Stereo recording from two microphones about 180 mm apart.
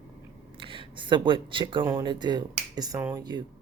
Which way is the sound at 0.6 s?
30° right (ahead or behind).